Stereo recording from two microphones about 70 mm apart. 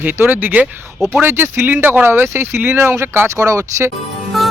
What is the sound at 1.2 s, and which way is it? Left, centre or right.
Speech, right.